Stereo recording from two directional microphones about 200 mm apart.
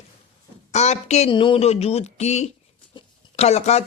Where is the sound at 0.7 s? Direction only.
35° left (ahead or behind).